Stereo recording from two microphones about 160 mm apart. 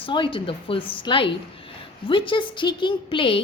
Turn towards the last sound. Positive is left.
turn(degrees=35)  # may be behind; listen again after turning